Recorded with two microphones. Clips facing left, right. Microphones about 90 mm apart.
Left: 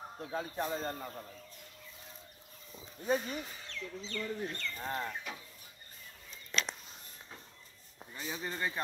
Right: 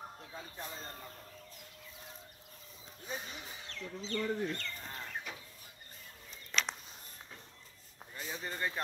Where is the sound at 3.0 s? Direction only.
60° left (ahead or behind).